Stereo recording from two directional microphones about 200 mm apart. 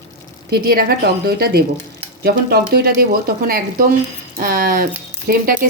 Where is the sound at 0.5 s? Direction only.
50° right (ahead or behind).